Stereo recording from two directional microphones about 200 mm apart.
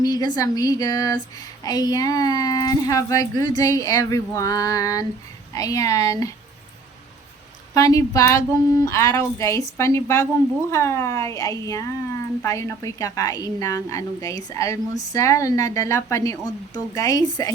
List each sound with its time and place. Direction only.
0.0 s a woman's voice: 20° left (ahead or behind)
7.7 s a woman's voice: 15° left (ahead or behind)